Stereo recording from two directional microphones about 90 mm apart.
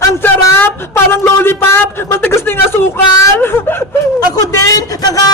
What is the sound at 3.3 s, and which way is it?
Snicker, 25° left (ahead or behind).